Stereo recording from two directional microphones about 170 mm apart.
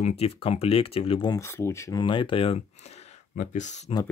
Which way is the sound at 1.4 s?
15° left (ahead or behind).